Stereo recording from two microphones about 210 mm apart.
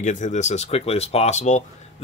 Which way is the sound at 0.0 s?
35° left (ahead or behind).